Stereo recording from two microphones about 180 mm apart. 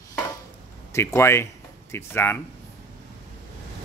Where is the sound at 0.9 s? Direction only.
15° left (ahead or behind).